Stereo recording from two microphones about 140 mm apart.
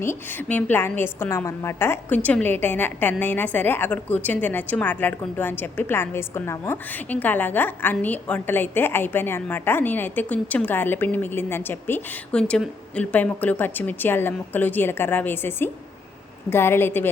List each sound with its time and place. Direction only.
0.0 s a woman's voice: 15° left (ahead or behind)